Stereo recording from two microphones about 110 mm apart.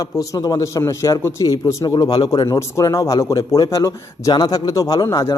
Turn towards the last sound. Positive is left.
turn(degrees=30)  # may be behind; listen again after turning